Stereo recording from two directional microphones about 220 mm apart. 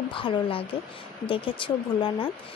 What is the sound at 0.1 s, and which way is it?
Speech, 25° left (ahead or behind).